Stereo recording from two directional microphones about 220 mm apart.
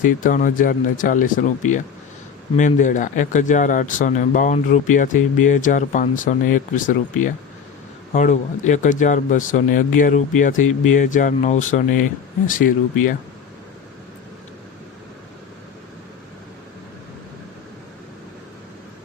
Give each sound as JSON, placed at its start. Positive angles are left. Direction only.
{"t": 0.0, "sound": "speech", "side_deg": 35}